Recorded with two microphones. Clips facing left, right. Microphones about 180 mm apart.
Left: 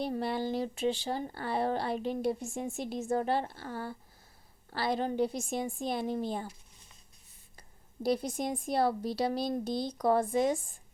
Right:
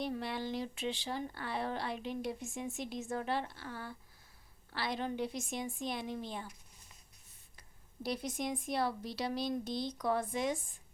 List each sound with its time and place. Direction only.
0.0 s speech: 35° left (ahead or behind)
8.0 s speech: 35° left (ahead or behind)